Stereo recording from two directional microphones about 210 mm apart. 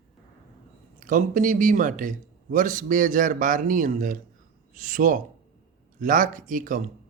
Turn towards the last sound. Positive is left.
turn(degrees=-40)  # may be behind; listen again after turning